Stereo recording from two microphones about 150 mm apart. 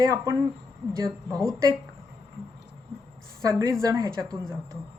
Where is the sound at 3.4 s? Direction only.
20° right (ahead or behind).